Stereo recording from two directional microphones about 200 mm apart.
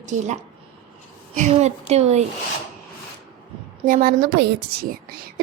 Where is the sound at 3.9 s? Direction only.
45° right (ahead or behind).